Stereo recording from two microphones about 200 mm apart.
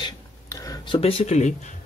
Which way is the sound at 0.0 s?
15° left (ahead or behind).